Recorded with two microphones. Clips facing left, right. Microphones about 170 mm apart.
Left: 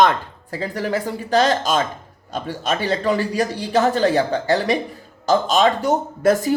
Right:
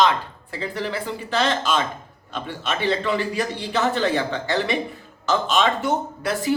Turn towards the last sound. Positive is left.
turn(degrees=45)  # may be behind; listen again after turning